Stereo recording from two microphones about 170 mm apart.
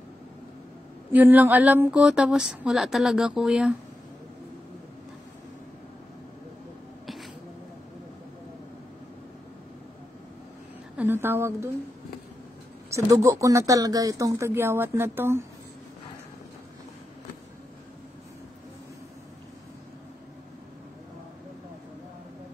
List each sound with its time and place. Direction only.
1.1 s speech: 10° right (ahead or behind)
11.0 s a woman's voice: 10° right (ahead or behind)
12.9 s speech: 20° right (ahead or behind)